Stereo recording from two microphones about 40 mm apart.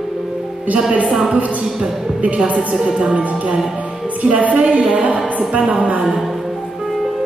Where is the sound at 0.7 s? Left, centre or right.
Right.